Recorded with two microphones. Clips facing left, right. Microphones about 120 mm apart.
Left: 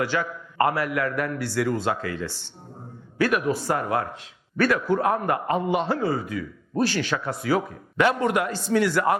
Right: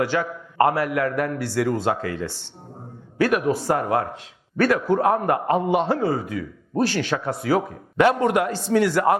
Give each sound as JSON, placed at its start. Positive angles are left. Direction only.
{"t": 0.0, "sound": "a man's voice", "side_deg": -45}
{"t": 6.8, "sound": "a man's voice", "side_deg": -55}
{"t": 7.2, "sound": "a man's voice", "side_deg": -40}